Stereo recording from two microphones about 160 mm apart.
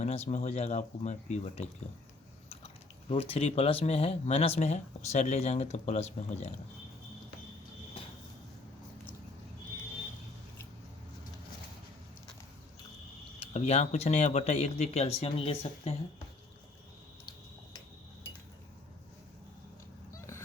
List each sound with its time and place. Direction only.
0.0 s speech: 45° left (ahead or behind)
13.4 s speech: 40° left (ahead or behind)